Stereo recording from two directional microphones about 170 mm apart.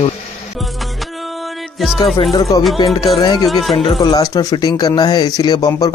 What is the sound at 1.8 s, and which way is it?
Speech, centre (ahead or behind).